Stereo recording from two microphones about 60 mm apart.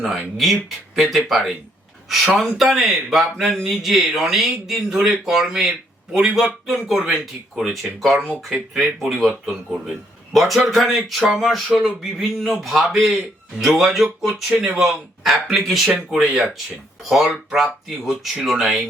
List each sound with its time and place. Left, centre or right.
0.0 s speech: centre